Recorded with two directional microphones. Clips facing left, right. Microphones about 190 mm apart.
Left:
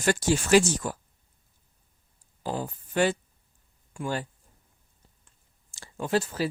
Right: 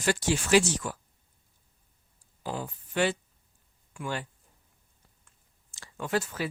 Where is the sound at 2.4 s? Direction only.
40° left (ahead or behind).